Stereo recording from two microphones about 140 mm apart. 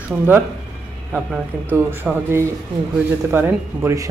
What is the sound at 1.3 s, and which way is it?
Speech, 15° right (ahead or behind).